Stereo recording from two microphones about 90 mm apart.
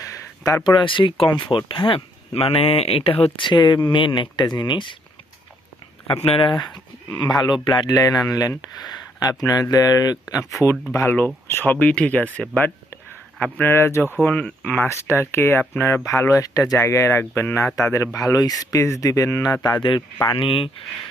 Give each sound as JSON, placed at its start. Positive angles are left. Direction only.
{"t": 0.0, "sound": "a sound", "side_deg": 40}
{"t": 0.6, "sound": "speech", "side_deg": 60}
{"t": 1.3, "sound": "speech", "side_deg": 65}
{"t": 6.1, "sound": "speech", "side_deg": 85}
{"t": 7.2, "sound": "speech", "side_deg": 55}
{"t": 7.9, "sound": "speech", "side_deg": 40}
{"t": 11.4, "sound": "speech", "side_deg": 20}
{"t": 14.2, "sound": "speech", "side_deg": 10}
{"t": 14.8, "sound": "speech", "side_deg": 30}
{"t": 16.7, "sound": "speech", "side_deg": 30}
{"t": 19.6, "sound": "speech", "side_deg": 60}